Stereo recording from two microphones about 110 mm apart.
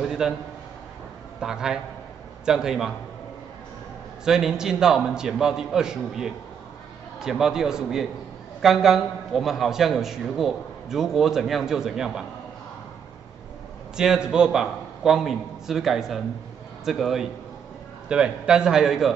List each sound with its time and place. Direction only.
0.0 s a sound: 5° right (ahead or behind)
1.4 s a man's voice: 5° right (ahead or behind)
4.2 s a man's voice: 5° right (ahead or behind)
13.9 s a man's voice: 5° right (ahead or behind)